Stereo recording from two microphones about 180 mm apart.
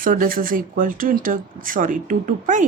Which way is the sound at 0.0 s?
50° right (ahead or behind).